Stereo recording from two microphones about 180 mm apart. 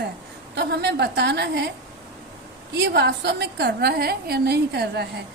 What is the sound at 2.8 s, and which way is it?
A woman's voice, 70° right (ahead or behind).